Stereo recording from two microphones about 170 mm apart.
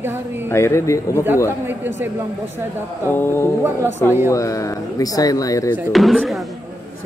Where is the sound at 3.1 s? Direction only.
10° left (ahead or behind).